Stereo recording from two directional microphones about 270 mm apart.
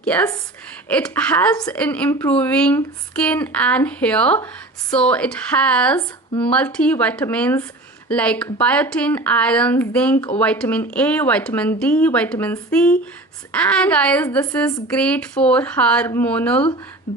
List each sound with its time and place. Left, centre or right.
0.0 s a woman's voice: centre
10.2 s speech: centre
10.4 s a woman's voice: centre